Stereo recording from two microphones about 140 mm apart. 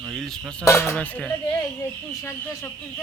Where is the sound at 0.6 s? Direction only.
20° left (ahead or behind).